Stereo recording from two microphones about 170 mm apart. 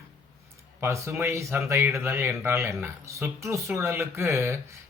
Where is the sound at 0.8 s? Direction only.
15° right (ahead or behind).